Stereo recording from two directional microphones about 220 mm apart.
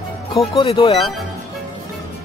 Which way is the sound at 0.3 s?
25° left (ahead or behind).